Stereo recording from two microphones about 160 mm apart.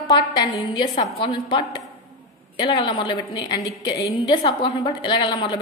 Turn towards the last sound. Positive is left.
turn(degrees=25)  # may be behind; listen again after turning